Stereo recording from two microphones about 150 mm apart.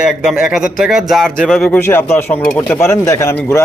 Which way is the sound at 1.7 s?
15° left (ahead or behind).